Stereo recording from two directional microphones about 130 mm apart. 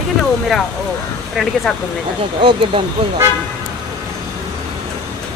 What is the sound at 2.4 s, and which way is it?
Speech, 40° right (ahead or behind).